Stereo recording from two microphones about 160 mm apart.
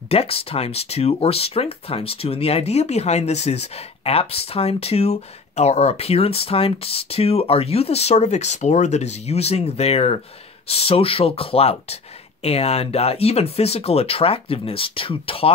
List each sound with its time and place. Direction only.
0.1 s speech: 40° left (ahead or behind)